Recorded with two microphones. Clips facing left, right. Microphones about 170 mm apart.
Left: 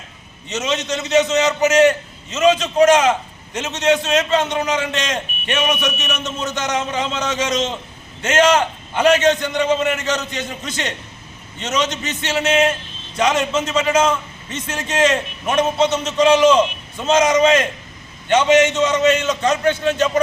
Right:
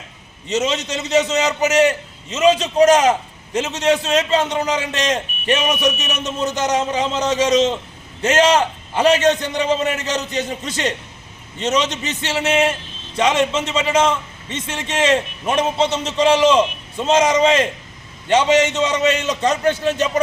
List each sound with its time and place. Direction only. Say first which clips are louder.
0.4 s a man's voice: right 2 dB; 35° right (ahead or behind)